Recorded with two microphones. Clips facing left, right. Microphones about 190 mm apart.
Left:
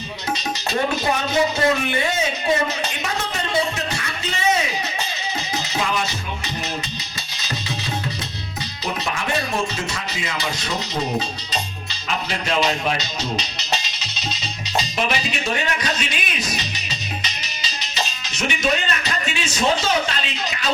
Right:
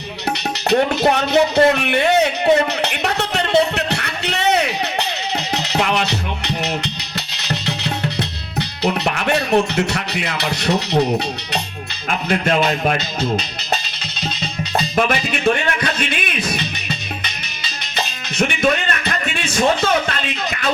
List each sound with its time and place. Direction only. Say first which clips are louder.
0.3 s music: right 8 dB; 70° right (ahead or behind)
12.3 s speech: right 5 dB; 55° right (ahead or behind)
14.8 s speech: right 4 dB; 55° right (ahead or behind)
17.2 s music: right 1 dB; 55° right (ahead or behind)